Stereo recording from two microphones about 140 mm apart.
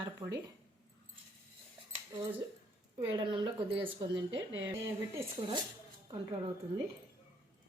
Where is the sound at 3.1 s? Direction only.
35° right (ahead or behind).